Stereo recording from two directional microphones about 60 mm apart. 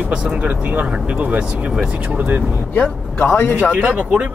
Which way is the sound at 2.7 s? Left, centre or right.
Left.